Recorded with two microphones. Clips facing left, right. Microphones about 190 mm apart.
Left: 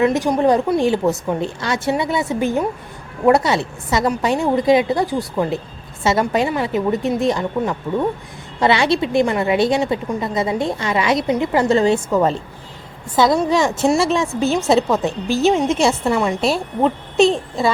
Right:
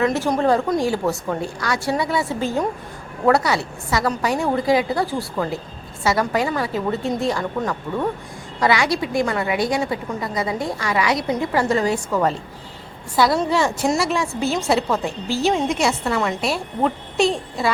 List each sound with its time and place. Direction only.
0.0 s a woman's voice: 15° left (ahead or behind)
13.4 s a woman's voice: 15° left (ahead or behind)